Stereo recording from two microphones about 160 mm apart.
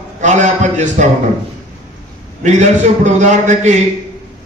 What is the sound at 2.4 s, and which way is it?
A man's voice, 50° right (ahead or behind).